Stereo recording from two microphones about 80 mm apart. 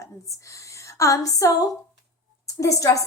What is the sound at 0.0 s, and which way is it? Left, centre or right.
A woman's voice, left.